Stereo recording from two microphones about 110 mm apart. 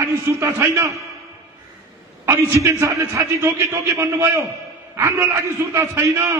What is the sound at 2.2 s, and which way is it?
A man's voice, 25° right (ahead or behind).